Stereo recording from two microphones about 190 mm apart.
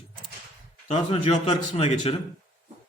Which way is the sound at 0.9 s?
30° left (ahead or behind).